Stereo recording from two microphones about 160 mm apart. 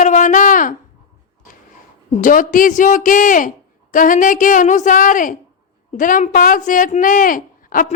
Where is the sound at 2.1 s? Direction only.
55° left (ahead or behind).